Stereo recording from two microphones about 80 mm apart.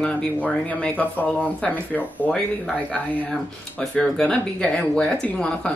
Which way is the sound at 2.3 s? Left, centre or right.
Centre.